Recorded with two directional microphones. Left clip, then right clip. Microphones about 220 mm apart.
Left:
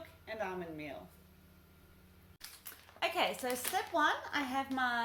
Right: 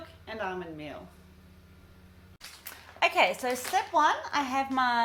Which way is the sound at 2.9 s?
30° right (ahead or behind).